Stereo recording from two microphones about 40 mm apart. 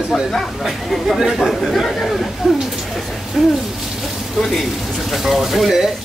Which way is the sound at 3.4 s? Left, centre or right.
Centre.